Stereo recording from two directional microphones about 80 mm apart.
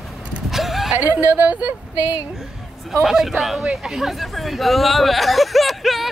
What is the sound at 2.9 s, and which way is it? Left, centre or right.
Speech, centre.